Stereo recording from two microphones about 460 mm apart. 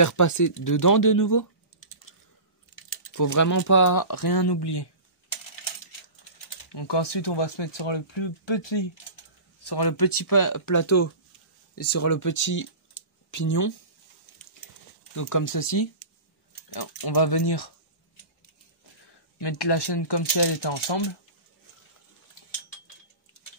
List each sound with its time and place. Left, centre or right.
0.0 s speech: left
3.1 s speech: left
6.7 s speech: left
9.6 s speech: left
15.1 s speech: left
19.4 s speech: left